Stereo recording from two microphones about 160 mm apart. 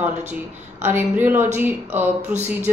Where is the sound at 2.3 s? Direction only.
45° right (ahead or behind).